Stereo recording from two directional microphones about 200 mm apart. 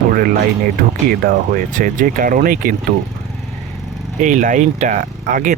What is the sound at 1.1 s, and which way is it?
Speech, 45° right (ahead or behind).